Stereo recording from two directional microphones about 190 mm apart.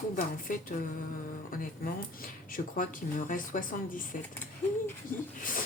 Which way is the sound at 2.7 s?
45° left (ahead or behind).